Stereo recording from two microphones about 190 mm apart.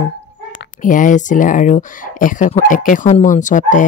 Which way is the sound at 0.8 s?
45° left (ahead or behind).